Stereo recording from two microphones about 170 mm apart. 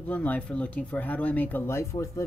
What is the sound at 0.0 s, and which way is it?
Speech, 10° left (ahead or behind).